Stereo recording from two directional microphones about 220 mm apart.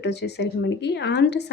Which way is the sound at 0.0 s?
50° left (ahead or behind).